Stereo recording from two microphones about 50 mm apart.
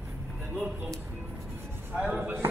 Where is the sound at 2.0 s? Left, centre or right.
Right.